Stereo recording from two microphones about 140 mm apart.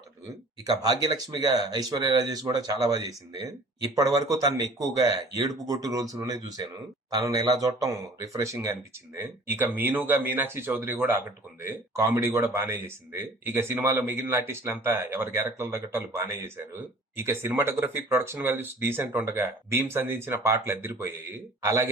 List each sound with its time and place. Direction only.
0.7 s speech: 30° right (ahead or behind)